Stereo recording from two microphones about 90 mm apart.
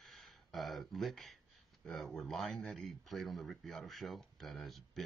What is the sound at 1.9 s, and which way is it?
Speech, 5° left (ahead or behind).